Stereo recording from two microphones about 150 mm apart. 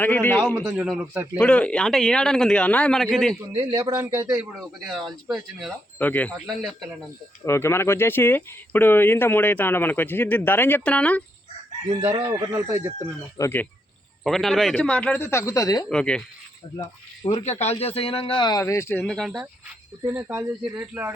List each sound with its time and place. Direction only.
0.0 s speech: 15° left (ahead or behind)
0.8 s a man's voice: centre (ahead or behind)
1.4 s a man's voice: 10° left (ahead or behind)
3.4 s speech: 30° right (ahead or behind)
4.9 s a man's voice: centre (ahead or behind)
7.4 s speech: 15° left (ahead or behind)
11.9 s speech: 40° right (ahead or behind)
12.2 s speech: 20° right (ahead or behind)
13.3 s speech: 15° left (ahead or behind)
14.3 s speech: centre (ahead or behind); by 15.9 s 25° left (ahead or behind)
15.9 s a man's voice: 5° left (ahead or behind)
17.2 s speech: 45° left (ahead or behind)
18.6 s speech: 20° left (ahead or behind); by 19.5 s centre (ahead or behind)
20.1 s speech: 15° right (ahead or behind)